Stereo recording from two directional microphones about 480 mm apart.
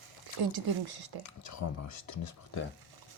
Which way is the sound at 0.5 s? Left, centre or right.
Right.